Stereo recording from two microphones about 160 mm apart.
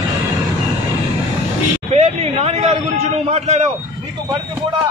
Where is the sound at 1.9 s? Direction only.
40° right (ahead or behind).